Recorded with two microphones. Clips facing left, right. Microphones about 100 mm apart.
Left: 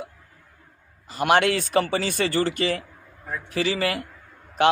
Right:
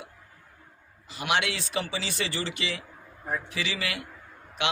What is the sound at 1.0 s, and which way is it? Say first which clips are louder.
A man's voice: left 8 dB; 45° left (ahead or behind).